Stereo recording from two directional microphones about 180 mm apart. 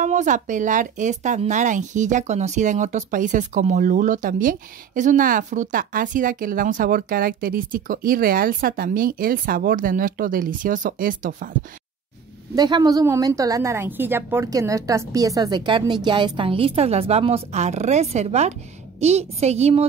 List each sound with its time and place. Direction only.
0.0 s speech: 45° right (ahead or behind)
12.5 s a woman's voice: 25° right (ahead or behind)